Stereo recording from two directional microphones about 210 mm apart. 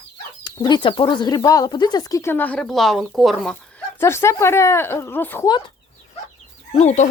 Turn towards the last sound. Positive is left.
turn(degrees=35)  # may be behind; listen again after turning